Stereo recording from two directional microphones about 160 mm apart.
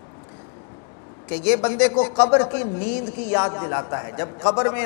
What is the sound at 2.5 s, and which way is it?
Speech, 15° left (ahead or behind).